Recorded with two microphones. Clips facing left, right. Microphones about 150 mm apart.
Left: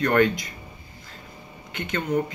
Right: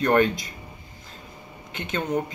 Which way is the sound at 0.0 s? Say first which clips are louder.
Even; 20° right (ahead or behind).